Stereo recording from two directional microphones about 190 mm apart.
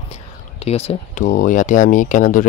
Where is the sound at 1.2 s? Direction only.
45° left (ahead or behind).